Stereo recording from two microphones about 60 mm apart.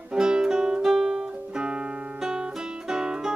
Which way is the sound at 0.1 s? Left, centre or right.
Centre.